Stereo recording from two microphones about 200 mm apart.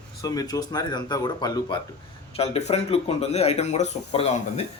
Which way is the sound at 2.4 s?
30° left (ahead or behind).